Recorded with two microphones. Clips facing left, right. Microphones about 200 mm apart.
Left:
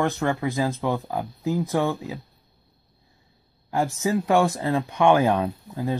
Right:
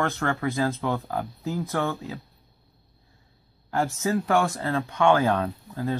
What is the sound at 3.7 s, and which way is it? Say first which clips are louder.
Speech: left 2 dB; 15° left (ahead or behind).